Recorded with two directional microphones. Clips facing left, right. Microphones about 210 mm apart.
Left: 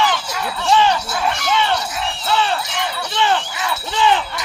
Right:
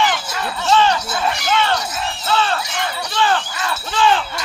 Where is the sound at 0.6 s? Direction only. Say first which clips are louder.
Even; 15° left (ahead or behind).